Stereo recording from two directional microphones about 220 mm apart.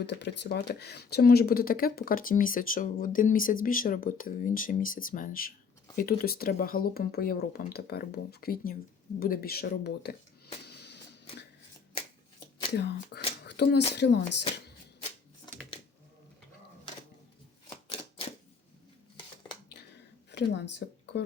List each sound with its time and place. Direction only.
0.0 s speech: 50° left (ahead or behind)
10.7 s music: 50° left (ahead or behind)
12.7 s speech: 50° left (ahead or behind)
20.3 s speech: 50° left (ahead or behind)